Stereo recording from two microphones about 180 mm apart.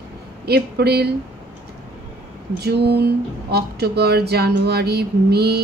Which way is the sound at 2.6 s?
65° right (ahead or behind).